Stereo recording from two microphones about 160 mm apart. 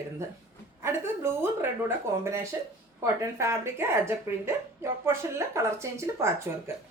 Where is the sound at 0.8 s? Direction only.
15° right (ahead or behind).